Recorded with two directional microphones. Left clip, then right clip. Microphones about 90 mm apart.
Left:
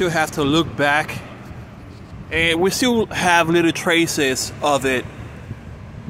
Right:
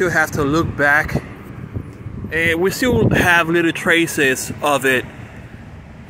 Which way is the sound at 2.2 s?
15° left (ahead or behind).